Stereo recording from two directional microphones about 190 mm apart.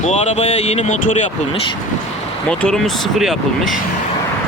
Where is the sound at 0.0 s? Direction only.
35° left (ahead or behind).